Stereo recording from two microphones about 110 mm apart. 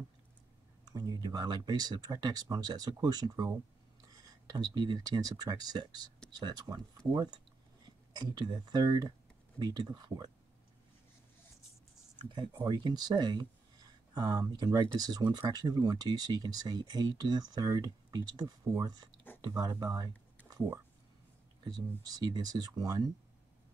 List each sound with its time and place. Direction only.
0.8 s speech: 35° right (ahead or behind)
4.2 s a sound: 35° right (ahead or behind)
4.7 s speech: 40° right (ahead or behind)
7.0 s speech: 10° left (ahead or behind)
8.1 s speech: 40° right (ahead or behind)
12.2 s speech: 45° right (ahead or behind)